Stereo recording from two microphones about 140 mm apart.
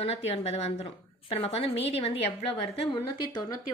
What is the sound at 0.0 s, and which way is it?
A woman's voice, 45° left (ahead or behind).